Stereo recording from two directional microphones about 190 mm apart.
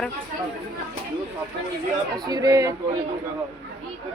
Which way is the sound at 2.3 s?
20° right (ahead or behind).